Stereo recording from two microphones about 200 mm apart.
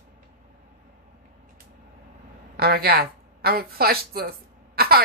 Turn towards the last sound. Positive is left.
turn(degrees=-50)  # may be behind; listen again after turning